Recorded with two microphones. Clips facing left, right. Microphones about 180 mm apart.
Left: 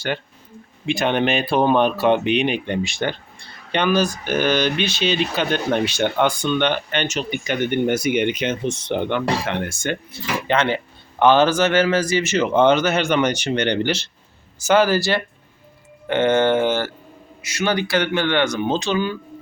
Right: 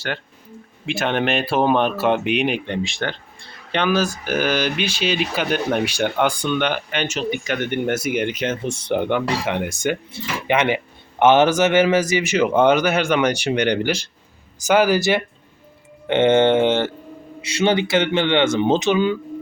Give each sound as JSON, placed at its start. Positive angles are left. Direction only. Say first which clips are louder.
{"t": 0.9, "sound": "speech", "louder": "left 2 dB", "side_deg": 0}
{"t": 2.6, "sound": "speech", "louder": "left 2 dB", "side_deg": 5}